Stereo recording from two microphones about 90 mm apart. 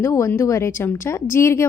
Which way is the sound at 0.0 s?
35° left (ahead or behind).